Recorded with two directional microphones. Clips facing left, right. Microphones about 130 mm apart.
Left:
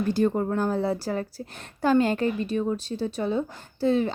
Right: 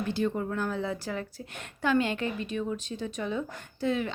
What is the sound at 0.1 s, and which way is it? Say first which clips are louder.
A woman's voice: left 6 dB; 40° left (ahead or behind).